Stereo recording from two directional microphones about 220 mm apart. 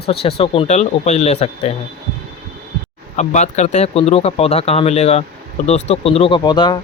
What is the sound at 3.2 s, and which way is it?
Speech, 30° left (ahead or behind).